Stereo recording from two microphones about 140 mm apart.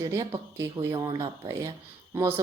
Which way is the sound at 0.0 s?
25° right (ahead or behind).